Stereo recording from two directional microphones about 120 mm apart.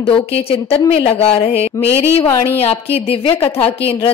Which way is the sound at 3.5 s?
15° left (ahead or behind).